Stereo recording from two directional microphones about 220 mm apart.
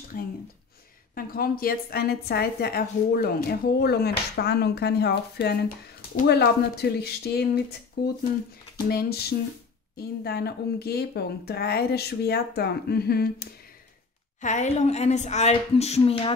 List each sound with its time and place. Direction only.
0.1 s a woman's voice: 40° left (ahead or behind)
14.4 s a woman's voice: 35° left (ahead or behind)